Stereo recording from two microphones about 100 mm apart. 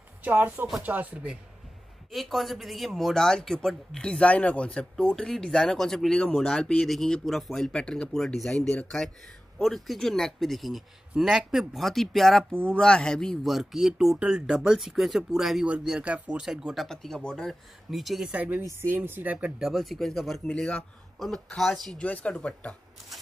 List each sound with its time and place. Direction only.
0.2 s speech: 20° right (ahead or behind)
2.0 s a man's voice: centre (ahead or behind)
18.3 s speech: 15° right (ahead or behind)
18.6 s speech: 25° right (ahead or behind); by 22.8 s 15° left (ahead or behind)